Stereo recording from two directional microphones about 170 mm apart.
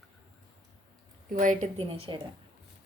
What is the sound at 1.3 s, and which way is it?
Speech, 50° right (ahead or behind).